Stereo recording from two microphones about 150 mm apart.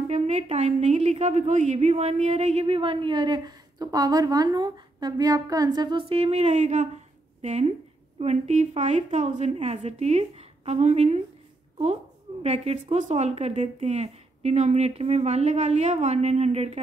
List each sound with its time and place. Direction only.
0.1 s a woman's voice: 50° right (ahead or behind)
12.4 s a woman's voice: 50° right (ahead or behind)